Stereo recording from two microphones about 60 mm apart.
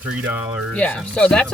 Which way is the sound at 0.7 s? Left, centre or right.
Left.